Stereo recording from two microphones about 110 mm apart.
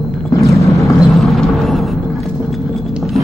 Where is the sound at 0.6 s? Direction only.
30° left (ahead or behind).